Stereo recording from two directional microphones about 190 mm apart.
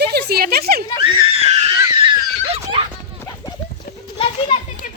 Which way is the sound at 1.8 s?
20° right (ahead or behind).